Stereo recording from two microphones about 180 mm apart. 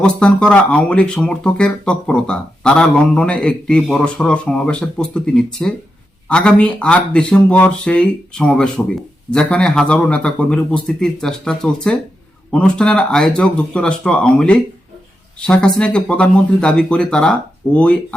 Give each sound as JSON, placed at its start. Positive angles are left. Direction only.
{"t": 0.0, "sound": "speech", "side_deg": 5}